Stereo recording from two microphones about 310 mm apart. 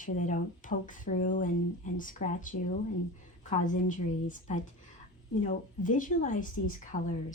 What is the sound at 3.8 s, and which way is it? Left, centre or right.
A woman's voice, left.